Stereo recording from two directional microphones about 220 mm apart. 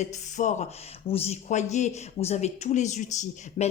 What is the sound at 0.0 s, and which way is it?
A woman's voice, 35° left (ahead or behind).